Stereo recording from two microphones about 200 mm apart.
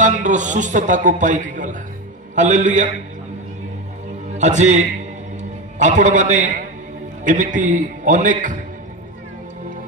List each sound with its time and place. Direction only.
0.0 s speech: 40° right (ahead or behind)
4.4 s a man's voice: 35° right (ahead or behind)